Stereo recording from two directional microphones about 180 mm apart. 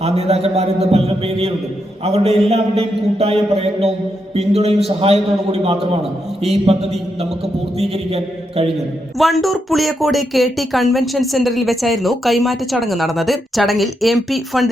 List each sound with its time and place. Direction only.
0.0 s a man's voice: 35° right (ahead or behind)
9.1 s speech: centre (ahead or behind)